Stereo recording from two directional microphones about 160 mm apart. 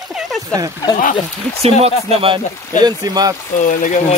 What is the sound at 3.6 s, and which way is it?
Speech, 55° left (ahead or behind).